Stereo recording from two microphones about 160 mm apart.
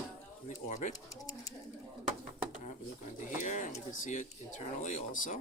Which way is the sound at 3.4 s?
50° left (ahead or behind).